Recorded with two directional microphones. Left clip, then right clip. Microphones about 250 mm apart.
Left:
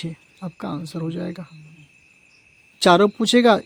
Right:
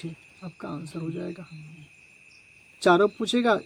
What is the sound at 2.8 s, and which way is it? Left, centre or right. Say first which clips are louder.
Speech: left 5 dB; left.